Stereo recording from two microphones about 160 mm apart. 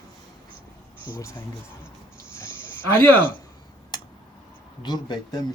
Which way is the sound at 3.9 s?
25° left (ahead or behind).